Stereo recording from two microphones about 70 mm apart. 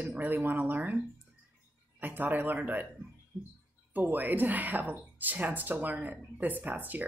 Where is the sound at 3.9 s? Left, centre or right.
Right.